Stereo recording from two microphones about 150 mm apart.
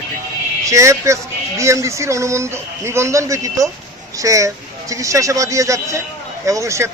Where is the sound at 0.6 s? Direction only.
20° right (ahead or behind).